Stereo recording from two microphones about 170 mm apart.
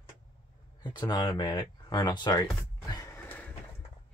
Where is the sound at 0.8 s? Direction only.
25° left (ahead or behind).